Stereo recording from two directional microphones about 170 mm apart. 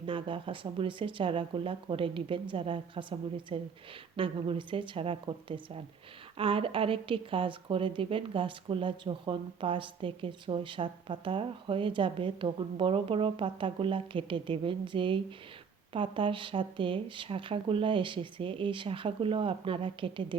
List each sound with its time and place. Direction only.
0.0 s a woman's voice: 30° right (ahead or behind)